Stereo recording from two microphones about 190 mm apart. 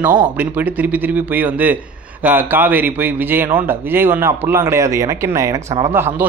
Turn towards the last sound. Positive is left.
turn(degrees=-10)  # may be behind; listen again after turning